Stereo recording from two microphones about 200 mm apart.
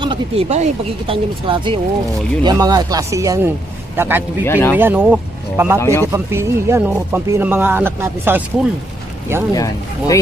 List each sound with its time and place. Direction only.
0.0 s a man's voice: 25° right (ahead or behind); by 4.2 s 10° right (ahead or behind)
4.4 s speech: 10° left (ahead or behind)
4.7 s speech: 10° right (ahead or behind)
5.8 s speech: 15° left (ahead or behind)
6.1 s speech: 15° right (ahead or behind)
9.6 s speech: 15° left (ahead or behind)